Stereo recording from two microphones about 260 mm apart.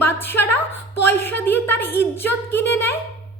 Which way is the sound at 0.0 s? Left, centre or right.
Centre.